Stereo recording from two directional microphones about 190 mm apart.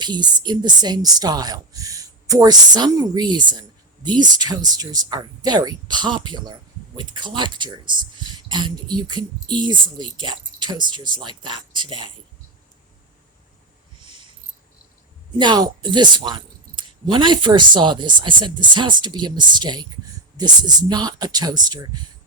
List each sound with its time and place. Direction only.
0.0 s a woman's voice: 25° right (ahead or behind)
15.4 s a woman's voice: 20° right (ahead or behind)